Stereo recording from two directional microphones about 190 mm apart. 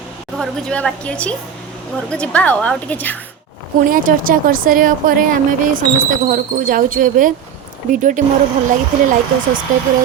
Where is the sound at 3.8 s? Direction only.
45° right (ahead or behind).